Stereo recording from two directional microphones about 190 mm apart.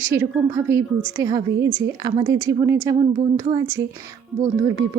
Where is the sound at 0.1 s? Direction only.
15° right (ahead or behind).